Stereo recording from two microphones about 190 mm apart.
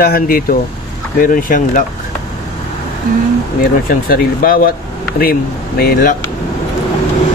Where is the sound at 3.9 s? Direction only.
50° left (ahead or behind).